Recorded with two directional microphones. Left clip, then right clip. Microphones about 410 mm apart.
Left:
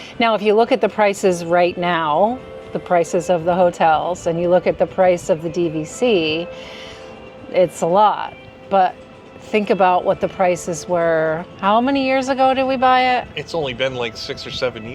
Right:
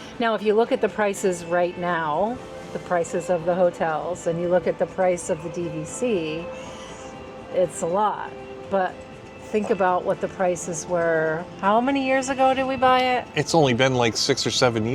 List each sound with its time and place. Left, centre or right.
0.2 s a woman's voice: left
7.5 s a woman's voice: left
13.3 s a man's voice: right